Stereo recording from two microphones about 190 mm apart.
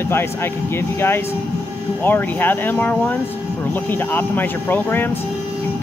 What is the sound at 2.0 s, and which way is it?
Speech, 10° left (ahead or behind).